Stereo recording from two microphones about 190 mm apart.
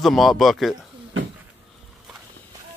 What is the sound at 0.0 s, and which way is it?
Speech, centre (ahead or behind).